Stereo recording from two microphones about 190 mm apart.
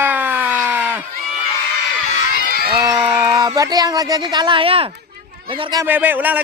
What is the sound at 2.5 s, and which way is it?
Run, 55° right (ahead or behind).